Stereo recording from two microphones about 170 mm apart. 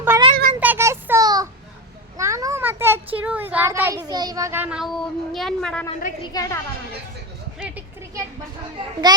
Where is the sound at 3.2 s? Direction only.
10° right (ahead or behind).